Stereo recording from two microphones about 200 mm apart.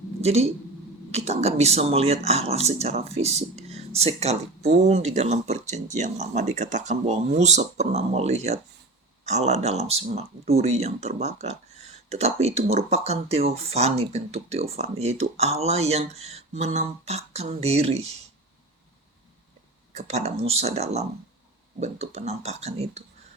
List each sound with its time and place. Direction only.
0.2 s speech: 30° right (ahead or behind)
19.9 s speech: 35° right (ahead or behind)